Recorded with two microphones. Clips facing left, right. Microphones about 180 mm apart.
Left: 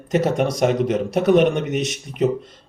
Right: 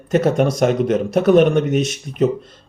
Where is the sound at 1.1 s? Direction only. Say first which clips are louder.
Right 3 dB; 15° left (ahead or behind).